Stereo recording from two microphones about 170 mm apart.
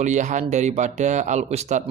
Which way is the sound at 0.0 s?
45° right (ahead or behind).